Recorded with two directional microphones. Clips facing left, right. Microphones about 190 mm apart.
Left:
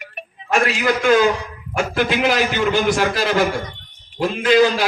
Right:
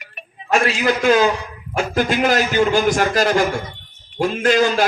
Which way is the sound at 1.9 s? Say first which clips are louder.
Right 1 dB; 45° right (ahead or behind).